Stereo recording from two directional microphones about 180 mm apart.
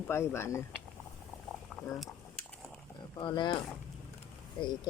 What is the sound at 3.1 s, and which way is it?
Speech, 25° left (ahead or behind).